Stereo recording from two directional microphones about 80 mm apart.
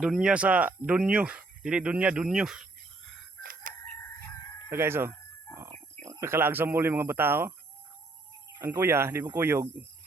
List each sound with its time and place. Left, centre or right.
0.0 s speech: centre
2.2 s speech: centre
4.7 s speech: right
8.5 s speech: right